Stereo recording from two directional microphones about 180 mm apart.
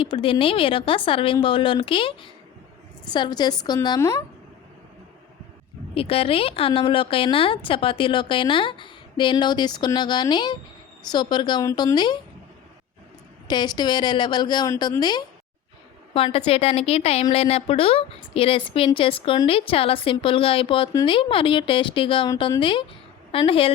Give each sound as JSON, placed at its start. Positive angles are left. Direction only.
{"t": 0.0, "sound": "speech", "side_deg": 30}
{"t": 5.9, "sound": "speech", "side_deg": 30}
{"t": 13.5, "sound": "speech", "side_deg": 25}